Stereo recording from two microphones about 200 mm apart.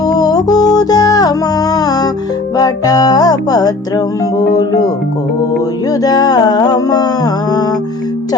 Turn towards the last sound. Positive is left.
turn(degrees=20)  # may be behind; listen again after turning